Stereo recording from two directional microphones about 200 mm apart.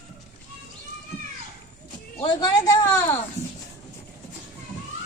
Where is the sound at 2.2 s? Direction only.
20° left (ahead or behind).